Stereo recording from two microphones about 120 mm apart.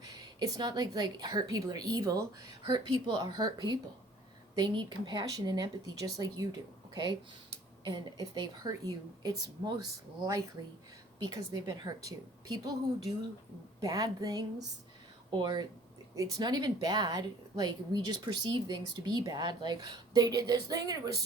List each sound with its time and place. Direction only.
0.0 s a woman's voice: 35° right (ahead or behind)
7.9 s a woman's voice: 35° right (ahead or behind)
11.2 s a woman's voice: 30° right (ahead or behind)
13.8 s a woman's voice: 30° right (ahead or behind)